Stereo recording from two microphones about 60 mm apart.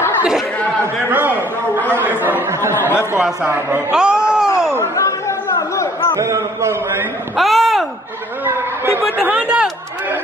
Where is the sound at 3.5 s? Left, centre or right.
Right.